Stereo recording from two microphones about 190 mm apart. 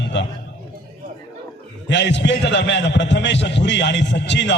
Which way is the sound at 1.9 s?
70° left (ahead or behind).